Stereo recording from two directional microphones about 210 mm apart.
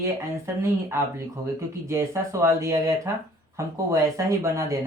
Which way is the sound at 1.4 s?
15° right (ahead or behind).